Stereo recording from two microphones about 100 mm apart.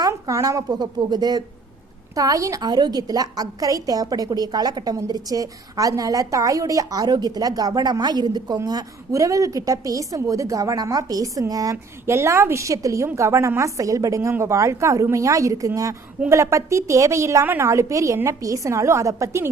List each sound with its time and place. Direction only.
0.0 s a woman's voice: 30° right (ahead or behind)